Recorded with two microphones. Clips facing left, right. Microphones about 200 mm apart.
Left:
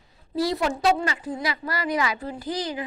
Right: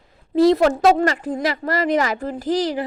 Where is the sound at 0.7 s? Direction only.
50° right (ahead or behind).